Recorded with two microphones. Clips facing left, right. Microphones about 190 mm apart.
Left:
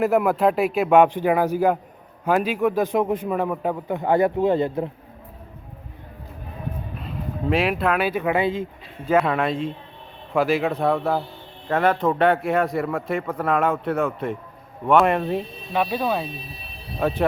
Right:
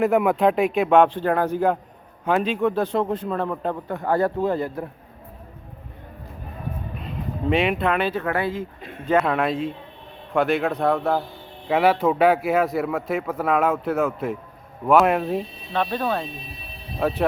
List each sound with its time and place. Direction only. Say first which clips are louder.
0.0 s a man's voice: even; 5° left (ahead or behind); by 4.9 s 20° left (ahead or behind)
7.0 s speech: right 1 dB; centre (ahead or behind); by 8.6 s 20° left (ahead or behind)
9.0 s a man's voice: even; centre (ahead or behind)
15.7 s a man's voice: left 1 dB; 10° left (ahead or behind)